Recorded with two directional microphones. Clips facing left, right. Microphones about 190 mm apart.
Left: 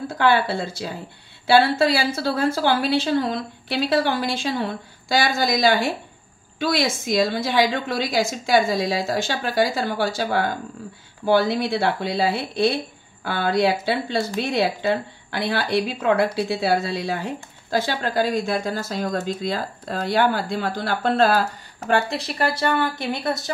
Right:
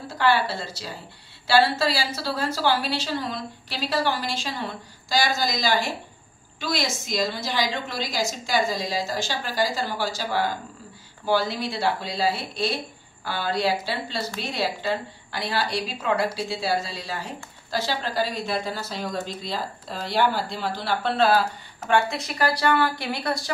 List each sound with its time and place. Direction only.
0.1 s a woman's voice: 55° left (ahead or behind); by 23.5 s 20° left (ahead or behind)